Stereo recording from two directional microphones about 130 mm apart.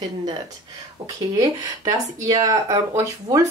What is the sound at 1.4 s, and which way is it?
Speech, 30° right (ahead or behind).